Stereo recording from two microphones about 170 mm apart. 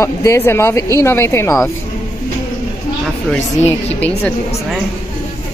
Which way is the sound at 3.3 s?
5° left (ahead or behind).